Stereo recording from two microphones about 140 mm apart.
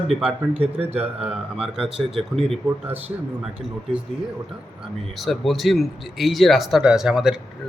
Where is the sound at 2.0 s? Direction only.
40° right (ahead or behind).